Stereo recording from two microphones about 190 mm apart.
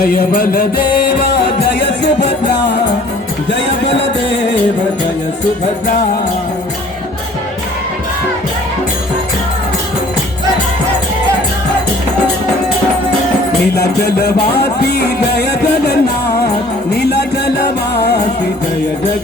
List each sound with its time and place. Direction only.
0.0 s music: 50° left (ahead or behind)
3.5 s music: 70° left (ahead or behind)
13.7 s music: 55° left (ahead or behind)
17.0 s music: 60° left (ahead or behind)